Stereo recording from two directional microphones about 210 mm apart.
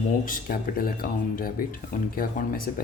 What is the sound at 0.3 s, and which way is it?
Speech, 45° left (ahead or behind).